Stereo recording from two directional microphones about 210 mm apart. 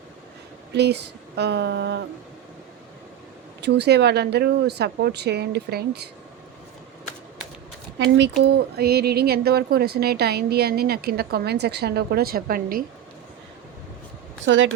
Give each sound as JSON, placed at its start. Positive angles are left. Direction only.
{"t": 0.7, "sound": "speech", "side_deg": -55}
{"t": 3.6, "sound": "speech", "side_deg": -55}
{"t": 7.9, "sound": "speech", "side_deg": -60}
{"t": 14.4, "sound": "speech", "side_deg": -60}